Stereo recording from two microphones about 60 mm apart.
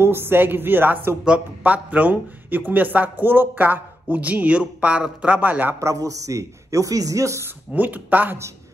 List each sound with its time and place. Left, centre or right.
0.0 s a woman's voice: right
5.8 s speech: right
7.7 s speech: right